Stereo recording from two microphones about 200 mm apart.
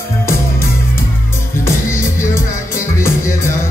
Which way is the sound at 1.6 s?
10° left (ahead or behind).